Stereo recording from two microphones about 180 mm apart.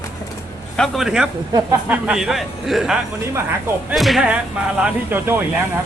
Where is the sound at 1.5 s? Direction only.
20° right (ahead or behind).